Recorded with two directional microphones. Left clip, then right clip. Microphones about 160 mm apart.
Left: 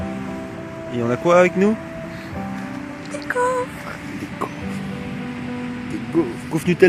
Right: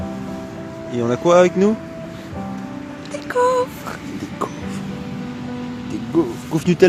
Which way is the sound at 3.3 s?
45° right (ahead or behind).